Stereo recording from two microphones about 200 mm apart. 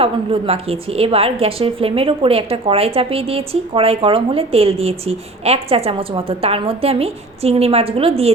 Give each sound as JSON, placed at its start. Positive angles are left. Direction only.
{"t": 0.0, "sound": "a woman's voice", "side_deg": -30}